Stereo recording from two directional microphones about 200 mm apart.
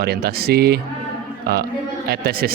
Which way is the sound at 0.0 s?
50° right (ahead or behind).